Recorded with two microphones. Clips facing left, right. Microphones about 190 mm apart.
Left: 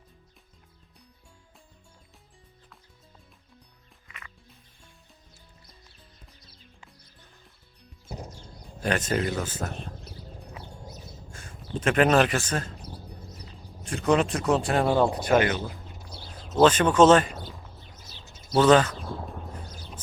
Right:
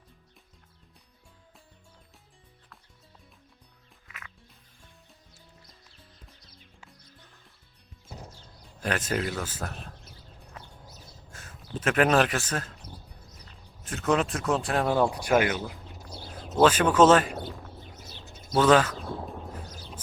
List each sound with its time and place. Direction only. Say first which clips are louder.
4.1 s music: even; 5° right (ahead or behind)
8.8 s speech: left 3 dB; 5° right (ahead or behind)
11.3 s speech: left 3 dB; centre (ahead or behind)
13.8 s speech: left 3 dB; centre (ahead or behind)
15.2 s speech: left 2 dB; 10° right (ahead or behind)
17.8 s bird: right 3 dB; 55° right (ahead or behind)
18.6 s a sound: left 2 dB; 5° right (ahead or behind)